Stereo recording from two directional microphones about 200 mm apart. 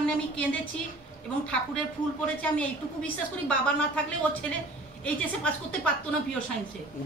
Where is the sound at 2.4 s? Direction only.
5° left (ahead or behind).